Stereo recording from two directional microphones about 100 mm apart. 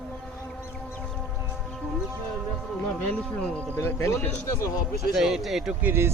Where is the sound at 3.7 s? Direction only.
25° left (ahead or behind).